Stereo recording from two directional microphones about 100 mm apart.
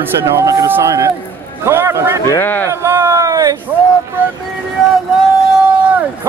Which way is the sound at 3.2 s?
40° right (ahead or behind).